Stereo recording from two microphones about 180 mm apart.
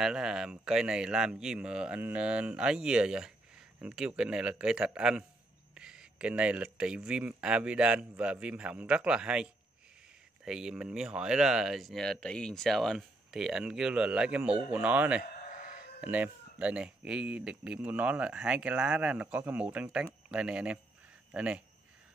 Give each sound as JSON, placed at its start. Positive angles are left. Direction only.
{"t": 0.0, "sound": "speech", "side_deg": -5}
{"t": 15.5, "sound": "chicken", "side_deg": 55}
{"t": 16.0, "sound": "speech", "side_deg": -10}